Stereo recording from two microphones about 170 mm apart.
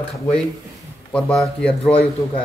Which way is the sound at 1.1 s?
5° left (ahead or behind).